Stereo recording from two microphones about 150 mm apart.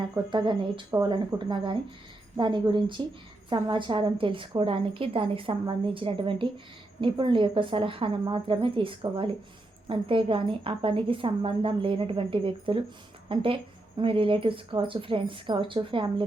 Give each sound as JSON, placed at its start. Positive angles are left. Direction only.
{"t": 0.3, "sound": "a woman's voice", "side_deg": -30}
{"t": 1.3, "sound": "a woman's voice", "side_deg": -20}